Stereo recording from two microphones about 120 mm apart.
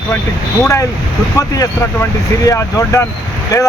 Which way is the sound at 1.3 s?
25° left (ahead or behind).